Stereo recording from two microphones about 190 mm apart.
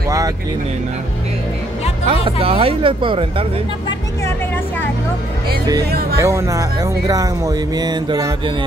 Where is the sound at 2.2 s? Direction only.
30° right (ahead or behind).